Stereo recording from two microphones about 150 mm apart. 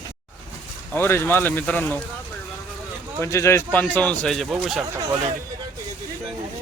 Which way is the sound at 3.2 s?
20° left (ahead or behind).